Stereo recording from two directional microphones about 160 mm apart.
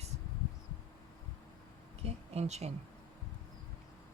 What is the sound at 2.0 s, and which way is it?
Speech, 40° right (ahead or behind).